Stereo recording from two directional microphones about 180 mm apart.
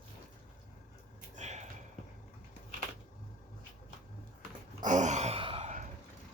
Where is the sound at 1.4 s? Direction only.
40° right (ahead or behind).